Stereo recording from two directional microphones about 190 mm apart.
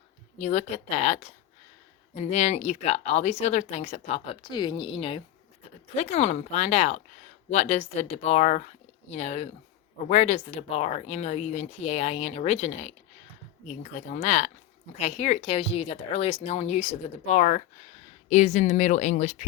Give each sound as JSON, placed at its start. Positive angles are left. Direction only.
{"t": 0.3, "sound": "speech", "side_deg": 35}
{"t": 2.3, "sound": "speech", "side_deg": 35}